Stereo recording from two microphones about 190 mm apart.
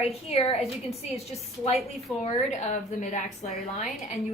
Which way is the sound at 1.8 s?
40° left (ahead or behind).